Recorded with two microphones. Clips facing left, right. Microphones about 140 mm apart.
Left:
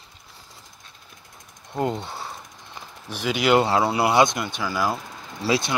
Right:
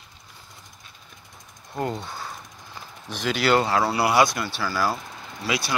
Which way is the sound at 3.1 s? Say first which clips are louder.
Left 2 dB; 10° left (ahead or behind).